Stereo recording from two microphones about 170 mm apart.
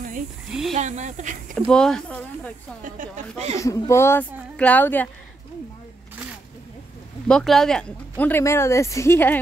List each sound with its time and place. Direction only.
0.5 s speech: centre (ahead or behind)
0.7 s a woman's voice: 45° right (ahead or behind)
1.7 s speech: 5° left (ahead or behind)
2.8 s a woman's voice: 45° right (ahead or behind)
3.5 s speech: 20° left (ahead or behind)
7.2 s speech: 5° left (ahead or behind)